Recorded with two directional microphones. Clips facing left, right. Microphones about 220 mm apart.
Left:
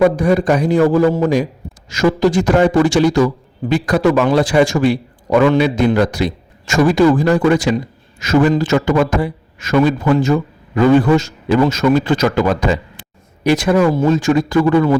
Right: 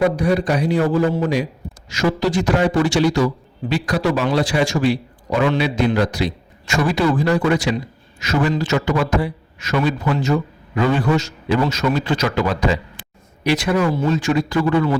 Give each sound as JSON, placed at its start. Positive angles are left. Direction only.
{"t": 0.2, "sound": "a man's voice", "side_deg": 50}